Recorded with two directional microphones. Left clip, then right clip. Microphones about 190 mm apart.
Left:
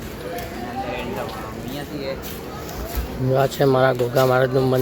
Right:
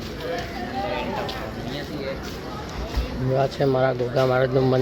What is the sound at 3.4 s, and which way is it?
Speech, 20° left (ahead or behind).